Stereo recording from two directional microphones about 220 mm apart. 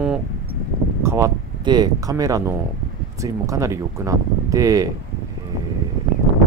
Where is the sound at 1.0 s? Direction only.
15° right (ahead or behind).